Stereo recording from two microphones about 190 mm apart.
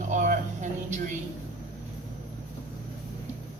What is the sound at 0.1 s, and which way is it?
Music, 40° right (ahead or behind).